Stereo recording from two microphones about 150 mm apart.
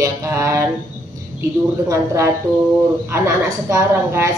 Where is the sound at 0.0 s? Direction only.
20° right (ahead or behind).